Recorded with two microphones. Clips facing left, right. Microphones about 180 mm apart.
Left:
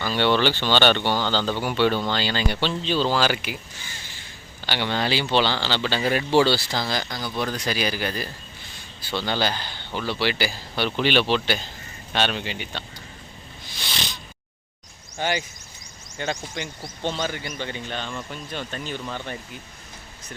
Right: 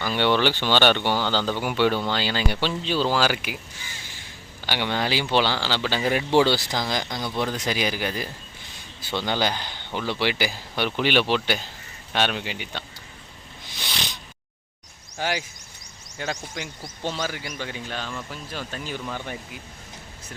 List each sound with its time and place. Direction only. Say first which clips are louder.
0.0 s speech: left 1 dB; 15° right (ahead or behind)
4.6 s speech: left 1 dB; 15° right (ahead or behind)
15.2 s speech: left 2 dB; 5° right (ahead or behind)